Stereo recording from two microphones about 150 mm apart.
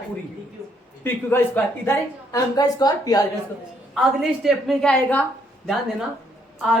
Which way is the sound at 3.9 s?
Centre (ahead or behind).